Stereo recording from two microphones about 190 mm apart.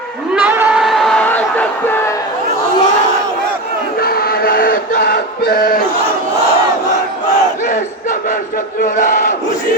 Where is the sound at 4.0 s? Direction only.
55° left (ahead or behind).